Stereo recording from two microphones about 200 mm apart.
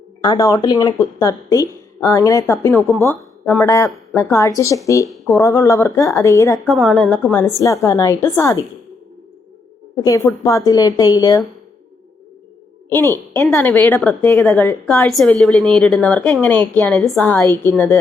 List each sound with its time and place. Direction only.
0.2 s speech: 20° left (ahead or behind)
6.7 s a woman's voice: centre (ahead or behind)
10.0 s speech: 15° left (ahead or behind)
13.3 s a woman's voice: 15° left (ahead or behind)